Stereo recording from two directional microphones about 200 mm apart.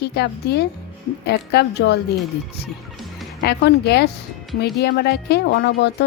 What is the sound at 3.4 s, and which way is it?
A woman's voice, 55° left (ahead or behind).